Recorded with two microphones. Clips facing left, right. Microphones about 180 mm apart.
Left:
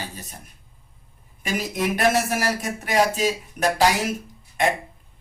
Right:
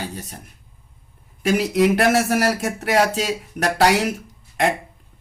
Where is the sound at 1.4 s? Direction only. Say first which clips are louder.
Right 8 dB; 75° right (ahead or behind).